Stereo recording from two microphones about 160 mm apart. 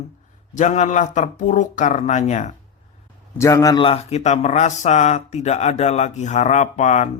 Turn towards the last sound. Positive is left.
turn(degrees=45)  # may be behind; listen again after turning